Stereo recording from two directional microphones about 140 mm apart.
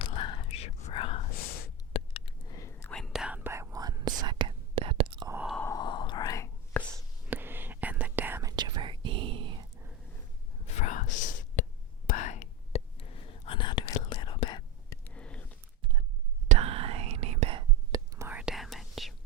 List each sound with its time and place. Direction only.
0.0 s whispering: 40° left (ahead or behind)
1.9 s a sound: 45° left (ahead or behind)
2.5 s whispering: 25° left (ahead or behind)
2.9 s whispering: centre (ahead or behind); by 5.3 s 40° right (ahead or behind)
5.6 s whispering: 30° left (ahead or behind)
6.9 s whispering: 15° right (ahead or behind); by 9.6 s 35° right (ahead or behind)
10.8 s whispering: 60° left (ahead or behind); by 14.6 s 40° left (ahead or behind)
15.0 s a sound: 10° left (ahead or behind)
16.5 s whispering: 45° right (ahead or behind)
17.6 s whispering: 25° right (ahead or behind)
18.3 s whispering: 5° right (ahead or behind)